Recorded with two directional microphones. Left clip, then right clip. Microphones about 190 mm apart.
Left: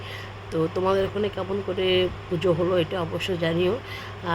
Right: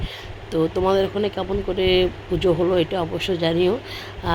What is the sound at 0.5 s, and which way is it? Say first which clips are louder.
Speech: right 4 dB; 15° right (ahead or behind).